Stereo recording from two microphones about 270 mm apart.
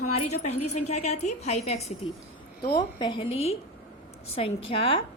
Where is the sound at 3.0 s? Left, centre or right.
Centre.